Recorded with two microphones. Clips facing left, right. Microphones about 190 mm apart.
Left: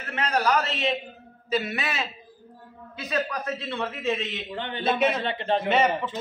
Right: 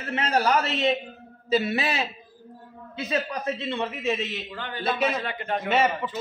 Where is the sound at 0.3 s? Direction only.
30° right (ahead or behind); by 4.2 s 15° right (ahead or behind).